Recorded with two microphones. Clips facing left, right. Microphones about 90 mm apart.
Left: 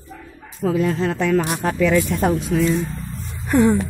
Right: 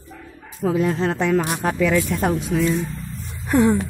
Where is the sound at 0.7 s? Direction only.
20° right (ahead or behind).